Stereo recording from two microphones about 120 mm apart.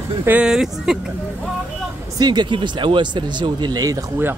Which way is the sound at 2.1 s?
35° right (ahead or behind).